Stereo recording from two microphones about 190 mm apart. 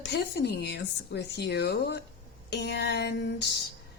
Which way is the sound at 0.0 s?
60° left (ahead or behind).